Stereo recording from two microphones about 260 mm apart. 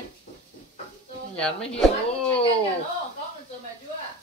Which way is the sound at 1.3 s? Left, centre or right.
Centre.